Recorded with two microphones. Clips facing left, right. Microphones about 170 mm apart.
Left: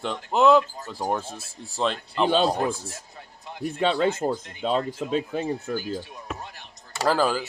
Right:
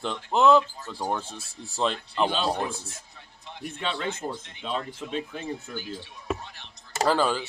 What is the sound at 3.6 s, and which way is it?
Speech, 40° left (ahead or behind).